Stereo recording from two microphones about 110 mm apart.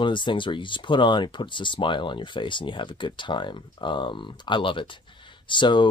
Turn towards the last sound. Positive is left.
turn(degrees=45)  # may be behind; listen again after turning